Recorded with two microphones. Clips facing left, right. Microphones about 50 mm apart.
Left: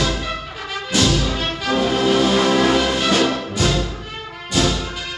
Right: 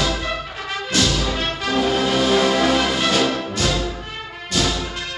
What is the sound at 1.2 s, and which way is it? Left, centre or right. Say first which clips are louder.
Music: left 1 dB; centre.